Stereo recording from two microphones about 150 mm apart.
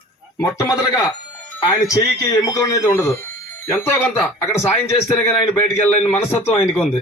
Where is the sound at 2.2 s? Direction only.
20° left (ahead or behind).